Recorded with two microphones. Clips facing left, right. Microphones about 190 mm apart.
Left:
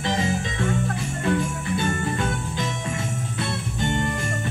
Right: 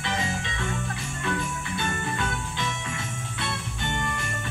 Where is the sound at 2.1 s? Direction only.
30° left (ahead or behind).